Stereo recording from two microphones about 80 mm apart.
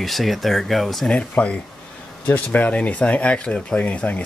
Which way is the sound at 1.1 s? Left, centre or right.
Centre.